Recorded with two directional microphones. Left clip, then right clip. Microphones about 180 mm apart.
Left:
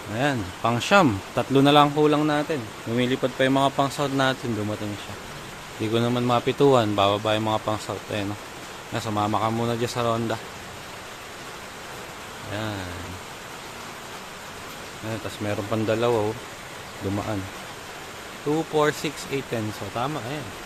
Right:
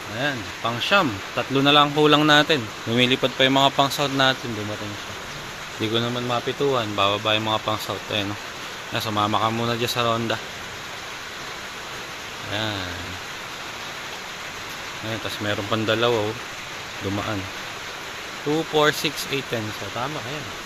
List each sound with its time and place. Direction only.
0.2 s speech: 35° left (ahead or behind)
2.0 s speech: 10° left (ahead or behind)
5.9 s speech: 35° left (ahead or behind)
6.9 s speech: 30° left (ahead or behind)
15.4 s speech: 10° left (ahead or behind)
18.7 s speech: 15° left (ahead or behind)